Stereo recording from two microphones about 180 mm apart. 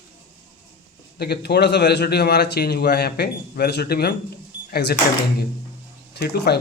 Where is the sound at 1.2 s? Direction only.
65° left (ahead or behind).